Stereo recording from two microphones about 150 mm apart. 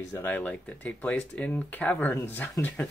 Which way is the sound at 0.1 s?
15° left (ahead or behind).